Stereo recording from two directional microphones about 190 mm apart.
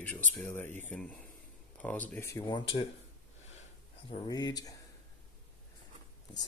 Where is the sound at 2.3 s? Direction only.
25° left (ahead or behind).